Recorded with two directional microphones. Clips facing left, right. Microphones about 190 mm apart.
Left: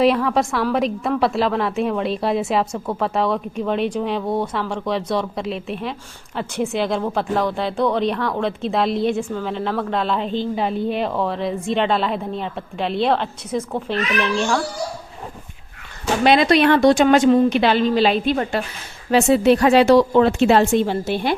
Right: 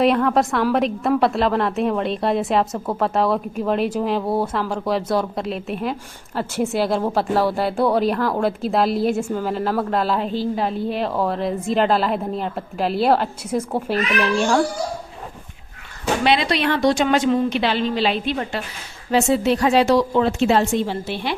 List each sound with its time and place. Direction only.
0.0 s a woman's voice: centre (ahead or behind)
16.2 s a woman's voice: 45° left (ahead or behind)
19.1 s speech: 65° left (ahead or behind); by 21.3 s 45° left (ahead or behind)